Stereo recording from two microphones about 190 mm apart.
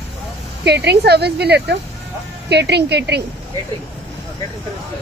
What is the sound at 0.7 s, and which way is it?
Speech, 60° right (ahead or behind).